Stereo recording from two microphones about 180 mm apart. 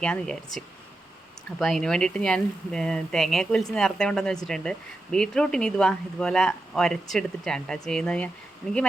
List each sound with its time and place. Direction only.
0.0 s speech: 5° left (ahead or behind)